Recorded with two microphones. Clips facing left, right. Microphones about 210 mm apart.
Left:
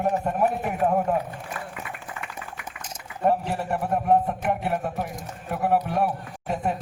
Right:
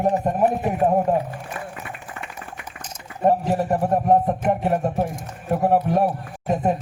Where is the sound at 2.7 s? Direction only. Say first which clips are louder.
Right 2 dB; 40° right (ahead or behind).